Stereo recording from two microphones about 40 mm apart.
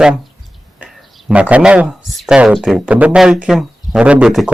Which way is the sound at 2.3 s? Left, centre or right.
Centre.